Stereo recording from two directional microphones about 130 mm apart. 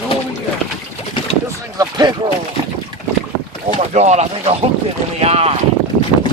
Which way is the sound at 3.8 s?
60° right (ahead or behind).